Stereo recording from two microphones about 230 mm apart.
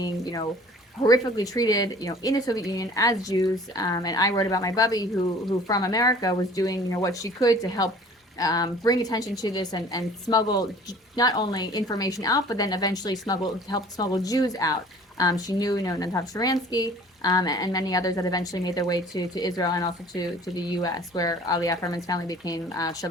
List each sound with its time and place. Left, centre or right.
0.0 s speech: centre